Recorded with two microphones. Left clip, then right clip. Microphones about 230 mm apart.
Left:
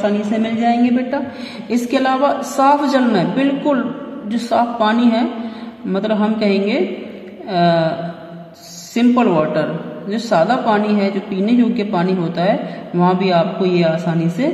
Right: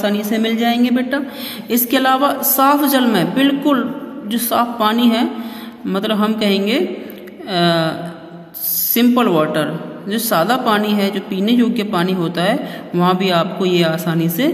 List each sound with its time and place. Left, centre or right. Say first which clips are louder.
0.0 s speech: even; right
8.9 s speech: even; right